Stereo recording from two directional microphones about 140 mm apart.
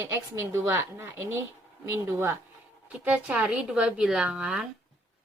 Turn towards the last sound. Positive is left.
turn(degrees=-5)  # may be behind; listen again after turning